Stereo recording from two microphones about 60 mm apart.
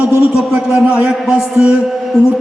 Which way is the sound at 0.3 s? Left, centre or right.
Centre.